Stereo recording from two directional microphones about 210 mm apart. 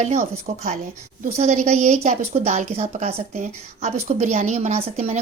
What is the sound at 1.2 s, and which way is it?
A woman's voice, 35° right (ahead or behind).